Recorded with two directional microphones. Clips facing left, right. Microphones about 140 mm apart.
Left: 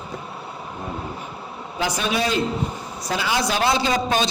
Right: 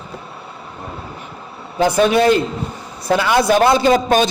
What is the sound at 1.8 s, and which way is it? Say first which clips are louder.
A man's voice: right 10 dB; 55° right (ahead or behind).